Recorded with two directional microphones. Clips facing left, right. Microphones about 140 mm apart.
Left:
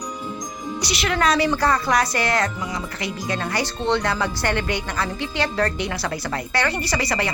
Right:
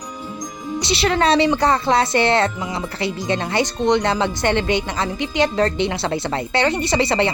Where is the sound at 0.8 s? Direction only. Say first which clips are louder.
Right 5 dB; 25° right (ahead or behind).